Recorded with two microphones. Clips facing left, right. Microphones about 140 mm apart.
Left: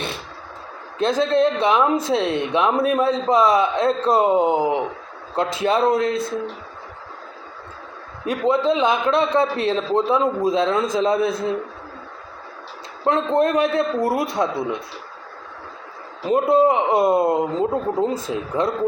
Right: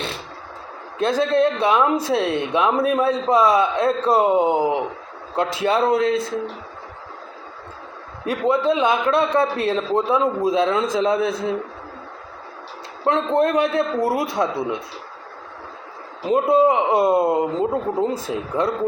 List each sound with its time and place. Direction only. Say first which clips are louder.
0.9 s speech: even; 5° right (ahead or behind)
8.2 s speech: even; 5° right (ahead or behind)
13.1 s a man's voice: even; centre (ahead or behind)
16.2 s speech: even; centre (ahead or behind)